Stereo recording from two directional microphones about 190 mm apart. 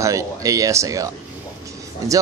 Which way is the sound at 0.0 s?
15° right (ahead or behind).